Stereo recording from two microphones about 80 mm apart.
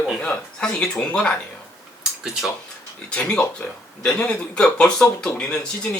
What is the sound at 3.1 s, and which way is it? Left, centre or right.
Speech, centre.